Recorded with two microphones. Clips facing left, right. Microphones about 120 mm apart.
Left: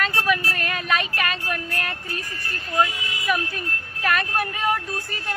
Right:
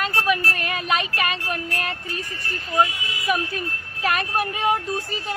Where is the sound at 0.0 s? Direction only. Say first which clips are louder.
Right 1 dB; 20° right (ahead or behind).